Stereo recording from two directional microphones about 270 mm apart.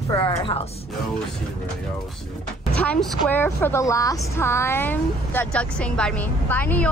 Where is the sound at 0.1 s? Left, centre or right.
Centre.